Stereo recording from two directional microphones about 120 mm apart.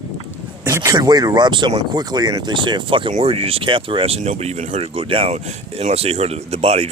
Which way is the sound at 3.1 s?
55° right (ahead or behind).